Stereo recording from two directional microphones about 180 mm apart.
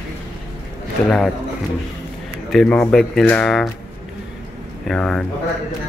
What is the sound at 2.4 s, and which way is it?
Speech, 5° left (ahead or behind).